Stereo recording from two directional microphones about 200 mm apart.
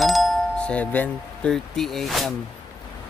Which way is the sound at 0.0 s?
Centre (ahead or behind).